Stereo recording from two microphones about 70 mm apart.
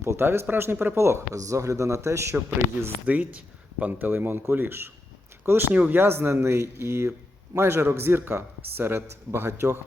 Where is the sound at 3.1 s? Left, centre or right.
Right.